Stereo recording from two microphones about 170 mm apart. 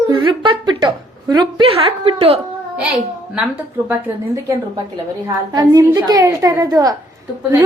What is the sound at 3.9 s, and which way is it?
Speech, 10° right (ahead or behind).